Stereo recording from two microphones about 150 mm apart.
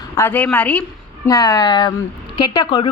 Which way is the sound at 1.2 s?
25° left (ahead or behind).